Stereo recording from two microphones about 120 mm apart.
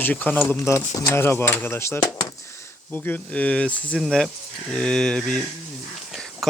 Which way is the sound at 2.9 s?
15° left (ahead or behind).